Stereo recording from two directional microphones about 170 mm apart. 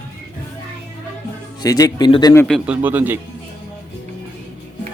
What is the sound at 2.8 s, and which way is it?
Speech, 10° right (ahead or behind).